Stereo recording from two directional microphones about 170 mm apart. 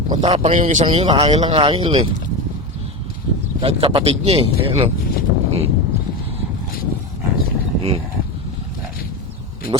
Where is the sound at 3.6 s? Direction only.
35° right (ahead or behind).